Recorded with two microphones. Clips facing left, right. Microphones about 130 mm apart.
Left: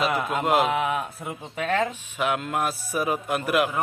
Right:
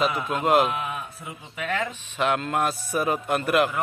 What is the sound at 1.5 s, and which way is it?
Speech, 30° left (ahead or behind).